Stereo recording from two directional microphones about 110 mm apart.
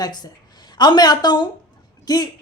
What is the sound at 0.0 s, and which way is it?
A woman's voice, 40° left (ahead or behind).